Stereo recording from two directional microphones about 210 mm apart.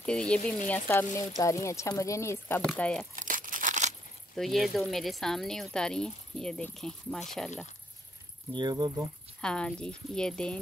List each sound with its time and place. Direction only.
0.0 s speech: 5° left (ahead or behind)
3.2 s crumpling: 40° right (ahead or behind)
4.4 s speech: centre (ahead or behind)
8.5 s speech: 20° right (ahead or behind)
9.4 s speech: 5° left (ahead or behind)